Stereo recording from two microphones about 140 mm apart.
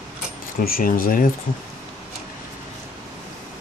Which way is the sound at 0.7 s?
90° left.